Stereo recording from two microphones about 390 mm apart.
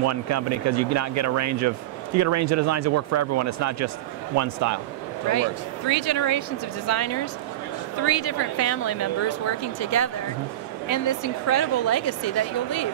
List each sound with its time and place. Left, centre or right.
0.0 s speech: right
5.3 s speech: left